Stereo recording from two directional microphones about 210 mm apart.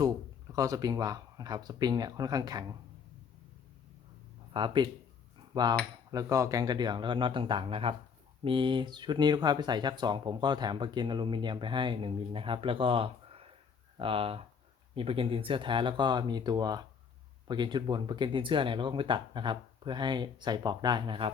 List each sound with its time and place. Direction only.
0.5 s speech: 15° right (ahead or behind)
4.5 s speech: 20° right (ahead or behind)